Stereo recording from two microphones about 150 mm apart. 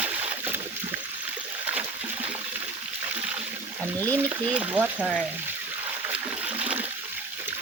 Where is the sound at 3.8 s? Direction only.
15° right (ahead or behind).